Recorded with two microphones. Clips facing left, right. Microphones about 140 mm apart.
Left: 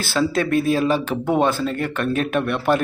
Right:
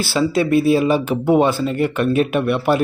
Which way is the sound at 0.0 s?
10° right (ahead or behind).